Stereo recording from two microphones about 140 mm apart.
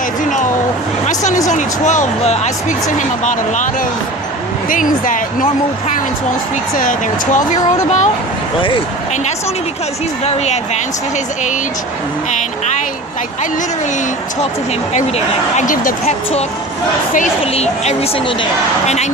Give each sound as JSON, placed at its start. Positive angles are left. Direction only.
{"t": 0.3, "sound": "a sound", "side_deg": 65}
{"t": 1.0, "sound": "speech", "side_deg": 60}
{"t": 4.7, "sound": "speech", "side_deg": 70}
{"t": 7.3, "sound": "speech", "side_deg": 65}
{"t": 10.2, "sound": "speech", "side_deg": 50}
{"t": 15.5, "sound": "speech", "side_deg": 70}
{"t": 17.4, "sound": "speech", "side_deg": 45}